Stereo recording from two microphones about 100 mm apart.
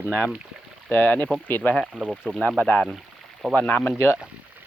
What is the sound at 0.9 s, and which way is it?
Speech, 20° left (ahead or behind).